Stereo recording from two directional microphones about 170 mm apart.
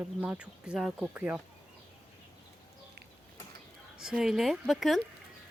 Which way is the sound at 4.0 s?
5° right (ahead or behind).